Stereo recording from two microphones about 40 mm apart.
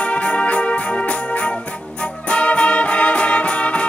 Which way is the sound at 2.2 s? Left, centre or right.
Left.